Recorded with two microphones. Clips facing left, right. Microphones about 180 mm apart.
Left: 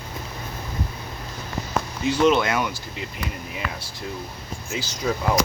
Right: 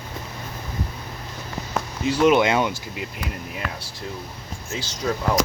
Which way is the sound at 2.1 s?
5° right (ahead or behind).